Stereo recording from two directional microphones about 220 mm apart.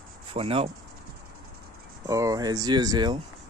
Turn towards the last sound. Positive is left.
turn(degrees=-20)  # may be behind; listen again after turning